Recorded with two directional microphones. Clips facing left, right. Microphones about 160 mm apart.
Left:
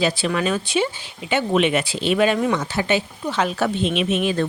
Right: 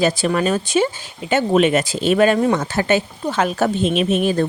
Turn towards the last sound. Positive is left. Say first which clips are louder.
# right 3 dB
turn(degrees=-40)  # may be behind; listen again after turning